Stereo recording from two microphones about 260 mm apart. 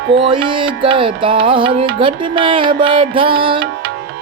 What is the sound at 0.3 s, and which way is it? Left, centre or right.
Music, centre.